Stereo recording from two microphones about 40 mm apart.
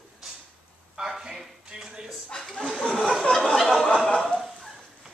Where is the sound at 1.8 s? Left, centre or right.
Centre.